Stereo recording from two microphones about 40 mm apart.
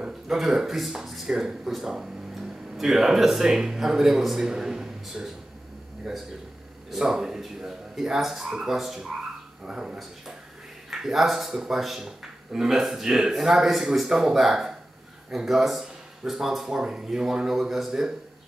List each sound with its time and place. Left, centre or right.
0.3 s a man's voice: centre
9.7 s speech: centre